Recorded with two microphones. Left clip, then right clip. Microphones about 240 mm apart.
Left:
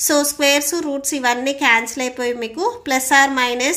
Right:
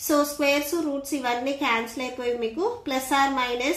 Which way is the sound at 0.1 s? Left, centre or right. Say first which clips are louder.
Left 5 dB; left.